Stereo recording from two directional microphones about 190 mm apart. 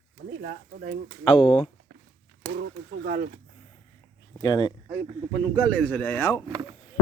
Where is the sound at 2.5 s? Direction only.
60° right (ahead or behind).